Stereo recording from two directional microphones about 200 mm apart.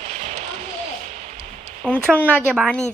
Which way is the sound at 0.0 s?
35° right (ahead or behind).